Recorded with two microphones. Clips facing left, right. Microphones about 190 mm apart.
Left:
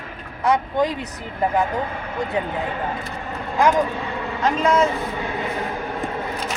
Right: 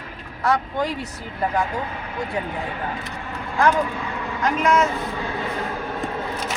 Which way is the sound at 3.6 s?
20° left (ahead or behind).